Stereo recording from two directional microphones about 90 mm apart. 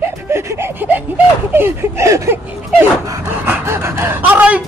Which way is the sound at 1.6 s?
35° right (ahead or behind).